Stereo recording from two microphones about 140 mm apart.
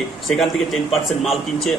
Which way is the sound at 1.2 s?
Centre (ahead or behind).